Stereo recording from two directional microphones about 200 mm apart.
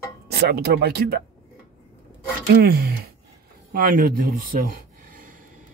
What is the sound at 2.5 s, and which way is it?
Speech, 50° right (ahead or behind).